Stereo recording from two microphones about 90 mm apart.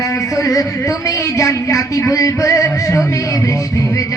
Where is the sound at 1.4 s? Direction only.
35° left (ahead or behind).